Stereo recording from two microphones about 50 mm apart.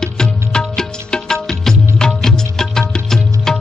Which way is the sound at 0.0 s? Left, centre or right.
Centre.